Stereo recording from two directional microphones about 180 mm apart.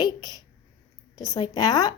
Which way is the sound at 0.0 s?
20° left (ahead or behind).